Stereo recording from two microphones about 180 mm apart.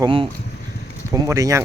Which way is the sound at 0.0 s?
30° right (ahead or behind).